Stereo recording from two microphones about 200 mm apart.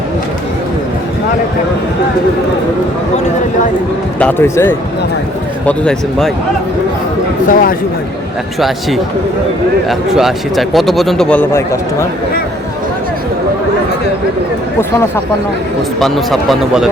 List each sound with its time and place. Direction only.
4.2 s a man's voice: 10° left (ahead or behind)
7.4 s speech: 45° left (ahead or behind)
8.5 s a man's voice: centre (ahead or behind)
14.8 s speech: 10° left (ahead or behind)
16.0 s a man's voice: centre (ahead or behind)